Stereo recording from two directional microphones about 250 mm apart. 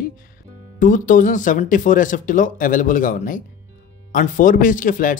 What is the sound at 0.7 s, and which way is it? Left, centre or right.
Speech, left.